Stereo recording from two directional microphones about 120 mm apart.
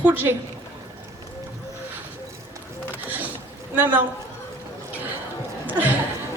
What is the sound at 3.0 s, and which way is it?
Boat, 15° right (ahead or behind).